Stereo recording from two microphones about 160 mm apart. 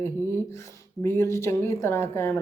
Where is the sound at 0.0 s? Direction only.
15° left (ahead or behind).